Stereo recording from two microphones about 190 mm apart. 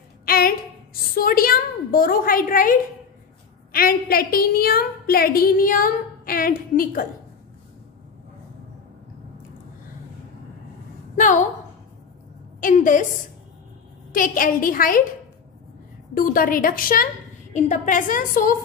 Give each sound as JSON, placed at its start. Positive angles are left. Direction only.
{"t": 0.2, "sound": "a sound", "side_deg": 50}
{"t": 1.1, "sound": "a woman's voice", "side_deg": 50}
{"t": 11.1, "sound": "a woman's voice", "side_deg": 45}
{"t": 12.5, "sound": "a sound", "side_deg": 45}
{"t": 14.1, "sound": "a woman's voice", "side_deg": 45}
{"t": 16.2, "sound": "a woman's voice", "side_deg": 45}